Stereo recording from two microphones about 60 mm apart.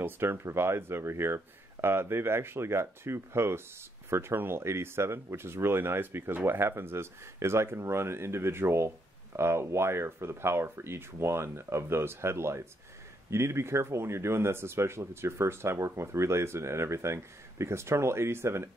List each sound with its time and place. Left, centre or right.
0.0 s speech: right